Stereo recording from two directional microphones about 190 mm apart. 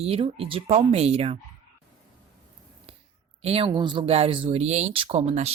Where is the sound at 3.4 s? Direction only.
30° right (ahead or behind).